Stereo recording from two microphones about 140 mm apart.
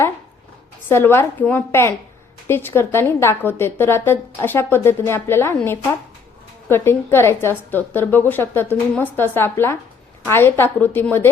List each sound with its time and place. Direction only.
0.9 s a woman's voice: 15° left (ahead or behind)
6.7 s a woman's voice: 15° left (ahead or behind)